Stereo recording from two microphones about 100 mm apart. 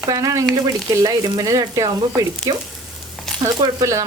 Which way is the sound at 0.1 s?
35° right (ahead or behind).